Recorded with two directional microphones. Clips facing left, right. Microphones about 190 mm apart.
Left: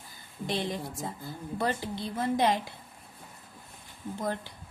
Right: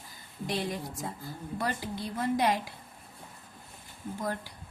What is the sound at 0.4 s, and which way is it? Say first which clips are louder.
Speech: left 1 dB; 25° left (ahead or behind).